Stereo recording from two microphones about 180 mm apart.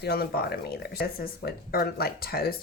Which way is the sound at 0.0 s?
60° left (ahead or behind).